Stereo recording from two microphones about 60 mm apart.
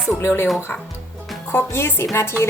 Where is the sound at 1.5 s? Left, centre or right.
Left.